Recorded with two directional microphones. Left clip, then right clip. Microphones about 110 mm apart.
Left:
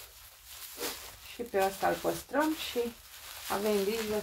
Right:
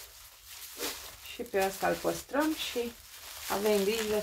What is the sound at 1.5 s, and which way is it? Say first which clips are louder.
Speech: even; 10° right (ahead or behind).